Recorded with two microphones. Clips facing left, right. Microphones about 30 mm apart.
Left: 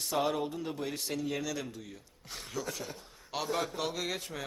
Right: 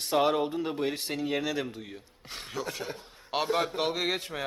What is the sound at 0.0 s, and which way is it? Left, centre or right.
Speech, right.